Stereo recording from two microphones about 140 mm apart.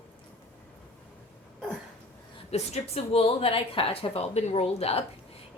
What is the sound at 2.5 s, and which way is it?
A woman's voice, 50° left (ahead or behind).